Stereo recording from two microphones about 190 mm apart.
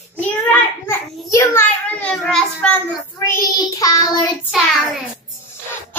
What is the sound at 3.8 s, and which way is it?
Child singing, 20° left (ahead or behind).